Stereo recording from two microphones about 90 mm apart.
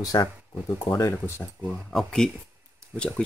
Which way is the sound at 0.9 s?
30° left (ahead or behind).